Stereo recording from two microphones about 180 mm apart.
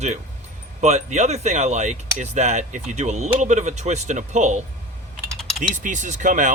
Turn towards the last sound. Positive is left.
turn(degrees=-45)  # may be behind; listen again after turning